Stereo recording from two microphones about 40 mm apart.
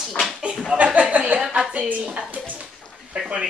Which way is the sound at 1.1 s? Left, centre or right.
Right.